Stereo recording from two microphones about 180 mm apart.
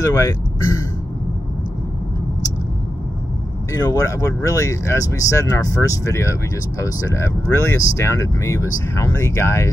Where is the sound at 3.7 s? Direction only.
20° left (ahead or behind).